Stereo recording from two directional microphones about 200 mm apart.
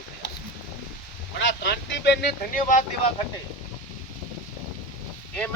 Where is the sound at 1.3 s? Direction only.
60° left (ahead or behind).